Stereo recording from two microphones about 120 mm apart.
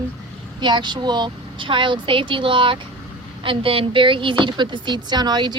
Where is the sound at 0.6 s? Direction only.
40° right (ahead or behind).